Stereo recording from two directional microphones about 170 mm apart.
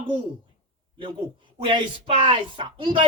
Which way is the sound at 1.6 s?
25° right (ahead or behind).